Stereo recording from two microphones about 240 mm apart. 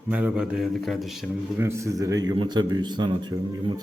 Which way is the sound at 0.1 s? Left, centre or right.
Centre.